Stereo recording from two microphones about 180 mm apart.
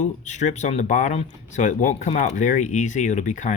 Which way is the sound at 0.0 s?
40° left (ahead or behind).